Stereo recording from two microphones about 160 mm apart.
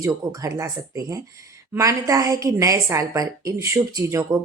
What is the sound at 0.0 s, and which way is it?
A woman's voice, 20° right (ahead or behind).